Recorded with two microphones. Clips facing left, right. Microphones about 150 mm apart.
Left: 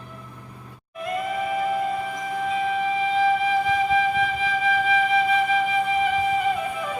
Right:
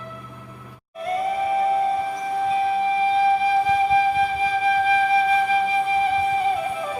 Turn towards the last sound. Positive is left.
turn(degrees=-30)  # may be behind; listen again after turning